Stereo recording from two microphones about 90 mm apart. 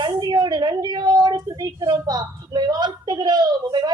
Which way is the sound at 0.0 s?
50° right (ahead or behind).